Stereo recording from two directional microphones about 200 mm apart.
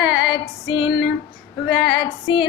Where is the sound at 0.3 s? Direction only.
25° left (ahead or behind).